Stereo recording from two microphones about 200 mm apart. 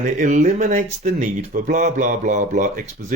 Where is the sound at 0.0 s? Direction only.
40° right (ahead or behind).